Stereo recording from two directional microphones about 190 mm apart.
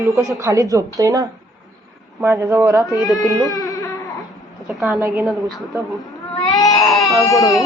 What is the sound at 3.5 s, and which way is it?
Baby cry, 20° left (ahead or behind).